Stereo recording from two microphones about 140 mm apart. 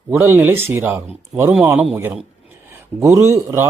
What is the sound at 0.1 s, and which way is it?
Speech, 15° right (ahead or behind).